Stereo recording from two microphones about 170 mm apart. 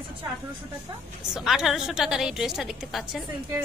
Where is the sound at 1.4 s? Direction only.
Centre (ahead or behind).